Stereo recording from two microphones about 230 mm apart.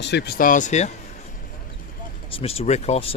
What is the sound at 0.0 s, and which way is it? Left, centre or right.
Speech, left.